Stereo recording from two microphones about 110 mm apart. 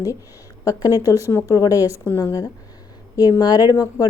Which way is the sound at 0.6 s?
35° left (ahead or behind).